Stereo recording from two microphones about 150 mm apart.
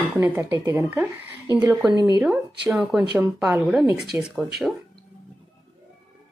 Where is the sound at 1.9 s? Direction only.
30° left (ahead or behind).